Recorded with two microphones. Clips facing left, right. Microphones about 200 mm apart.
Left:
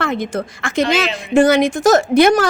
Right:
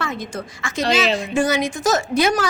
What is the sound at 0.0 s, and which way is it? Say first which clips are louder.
A woman's voice: left 7 dB; 60° left (ahead or behind).